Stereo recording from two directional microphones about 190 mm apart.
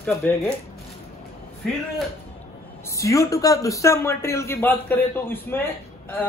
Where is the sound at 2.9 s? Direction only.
15° left (ahead or behind).